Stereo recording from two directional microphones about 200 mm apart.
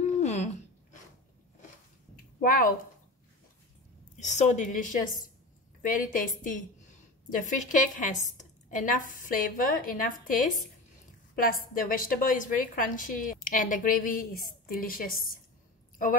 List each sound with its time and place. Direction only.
0.0 s a sound: 35° left (ahead or behind)
2.4 s a woman's voice: 45° left (ahead or behind)
4.2 s a woman's voice: 35° left (ahead or behind)
11.7 s a woman's voice: 45° left (ahead or behind)